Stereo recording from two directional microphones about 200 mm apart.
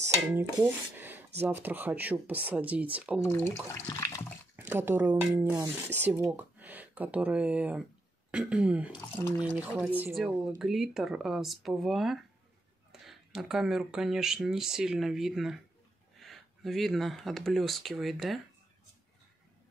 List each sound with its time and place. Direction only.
0.0 s speech: 10° right (ahead or behind)
3.3 s speech: 10° left (ahead or behind)
3.7 s water: 15° left (ahead or behind)
4.6 s speech: 10° right (ahead or behind)